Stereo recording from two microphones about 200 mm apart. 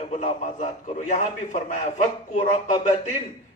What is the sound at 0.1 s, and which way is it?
A man's voice, 30° left (ahead or behind).